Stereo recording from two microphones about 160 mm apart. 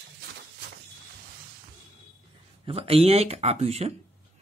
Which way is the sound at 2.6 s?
35° right (ahead or behind).